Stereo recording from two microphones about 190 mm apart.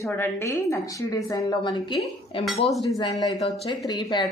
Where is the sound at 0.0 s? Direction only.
15° left (ahead or behind).